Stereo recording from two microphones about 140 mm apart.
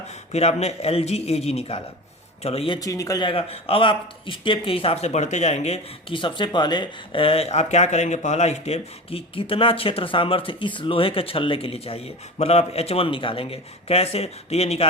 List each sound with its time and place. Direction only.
0.1 s a man's voice: 50° left (ahead or behind)
2.8 s a man's voice: 25° left (ahead or behind); by 14.8 s 50° left (ahead or behind)